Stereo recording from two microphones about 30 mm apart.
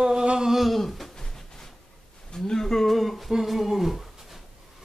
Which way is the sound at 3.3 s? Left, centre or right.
Centre.